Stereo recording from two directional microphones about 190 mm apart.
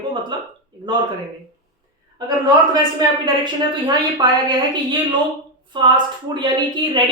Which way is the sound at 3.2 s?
20° right (ahead or behind).